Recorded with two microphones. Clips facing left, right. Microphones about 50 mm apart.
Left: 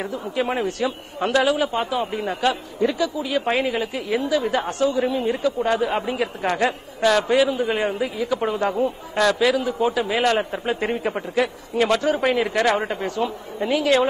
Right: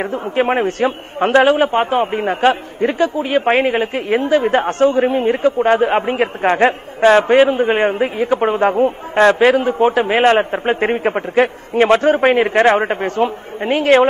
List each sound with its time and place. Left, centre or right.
0.0 s a man's voice: right